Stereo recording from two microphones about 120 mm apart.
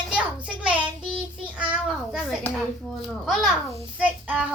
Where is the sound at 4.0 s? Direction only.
10° right (ahead or behind).